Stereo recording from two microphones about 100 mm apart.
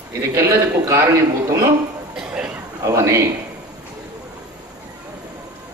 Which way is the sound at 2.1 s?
10° right (ahead or behind).